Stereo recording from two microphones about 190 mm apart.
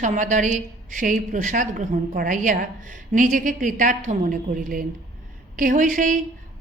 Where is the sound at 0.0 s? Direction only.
40° right (ahead or behind).